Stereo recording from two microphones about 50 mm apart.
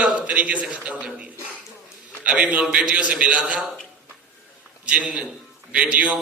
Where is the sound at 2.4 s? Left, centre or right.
Right.